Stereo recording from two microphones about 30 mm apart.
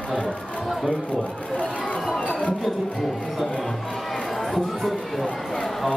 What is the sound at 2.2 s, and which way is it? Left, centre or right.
Music, left.